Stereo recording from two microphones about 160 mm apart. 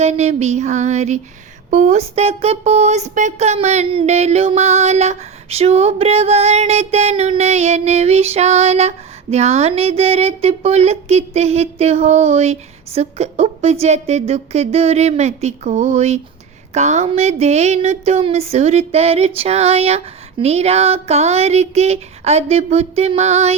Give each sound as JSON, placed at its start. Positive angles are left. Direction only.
{"t": 0.0, "sound": "speech", "side_deg": -45}